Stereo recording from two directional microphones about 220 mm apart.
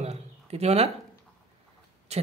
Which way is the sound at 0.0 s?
30° right (ahead or behind).